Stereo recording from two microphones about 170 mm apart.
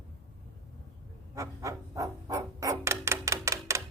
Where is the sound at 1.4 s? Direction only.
20° right (ahead or behind).